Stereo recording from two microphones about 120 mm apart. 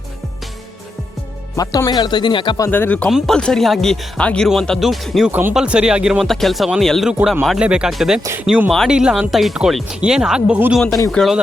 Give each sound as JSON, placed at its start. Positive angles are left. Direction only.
{"t": 1.5, "sound": "speech", "side_deg": 30}
{"t": 2.6, "sound": "speech", "side_deg": 15}
{"t": 3.1, "sound": "speech", "side_deg": -5}
{"t": 5.3, "sound": "speech", "side_deg": -15}